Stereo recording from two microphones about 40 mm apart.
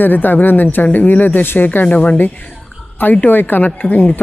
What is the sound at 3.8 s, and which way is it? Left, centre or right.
Speech, left.